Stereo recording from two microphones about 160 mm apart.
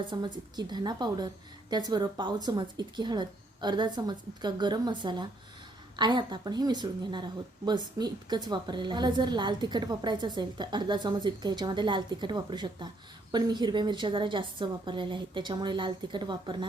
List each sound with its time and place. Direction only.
0.0 s a woman's voice: 30° right (ahead or behind)